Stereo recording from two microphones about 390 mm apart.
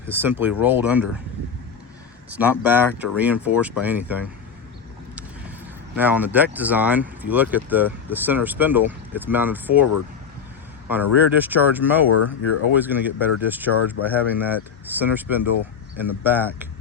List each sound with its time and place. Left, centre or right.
0.1 s speech: centre
2.4 s speech: centre
6.0 s speech: centre
10.9 s speech: centre
12.1 s speech: left
12.7 s speech: centre